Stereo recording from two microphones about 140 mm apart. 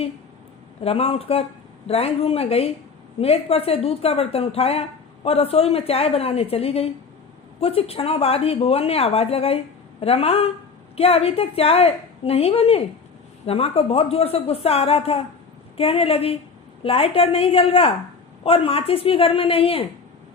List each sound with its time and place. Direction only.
0.9 s a woman's voice: 45° left (ahead or behind)